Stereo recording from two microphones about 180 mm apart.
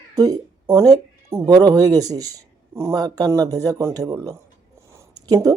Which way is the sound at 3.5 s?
20° right (ahead or behind).